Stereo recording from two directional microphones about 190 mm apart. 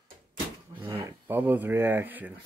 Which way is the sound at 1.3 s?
10° right (ahead or behind).